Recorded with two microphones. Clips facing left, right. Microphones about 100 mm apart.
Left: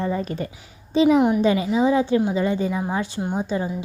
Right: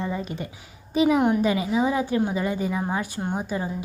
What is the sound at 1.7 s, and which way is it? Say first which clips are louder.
Speech: left 4 dB; 25° left (ahead or behind).